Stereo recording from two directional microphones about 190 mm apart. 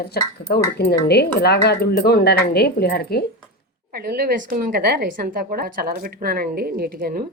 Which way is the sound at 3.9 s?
55° right (ahead or behind).